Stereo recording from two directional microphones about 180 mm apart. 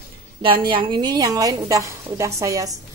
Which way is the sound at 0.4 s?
30° right (ahead or behind).